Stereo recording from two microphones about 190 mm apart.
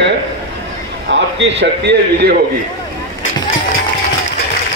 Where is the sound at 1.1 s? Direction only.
70° right (ahead or behind).